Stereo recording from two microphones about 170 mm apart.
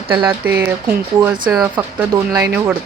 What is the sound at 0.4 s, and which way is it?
Speech, 10° right (ahead or behind).